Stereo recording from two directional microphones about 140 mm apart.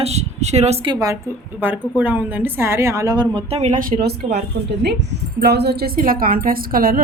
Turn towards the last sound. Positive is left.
turn(degrees=-90)